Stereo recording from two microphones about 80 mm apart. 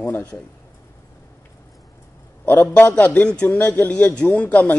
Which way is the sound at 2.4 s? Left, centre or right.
Left.